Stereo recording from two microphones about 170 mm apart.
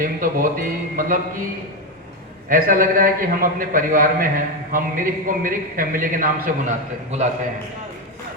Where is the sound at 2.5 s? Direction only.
55° right (ahead or behind).